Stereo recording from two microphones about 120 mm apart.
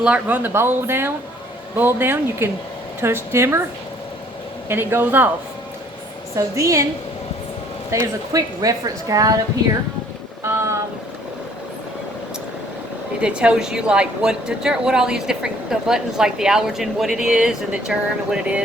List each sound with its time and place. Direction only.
0.0 s a woman's voice: 10° right (ahead or behind)
4.7 s speech: 20° right (ahead or behind)
6.3 s a woman's voice: 25° right (ahead or behind)
7.9 s a woman's voice: 25° right (ahead or behind)
10.4 s a sound: 25° right (ahead or behind)
13.2 s a woman's voice: 10° right (ahead or behind)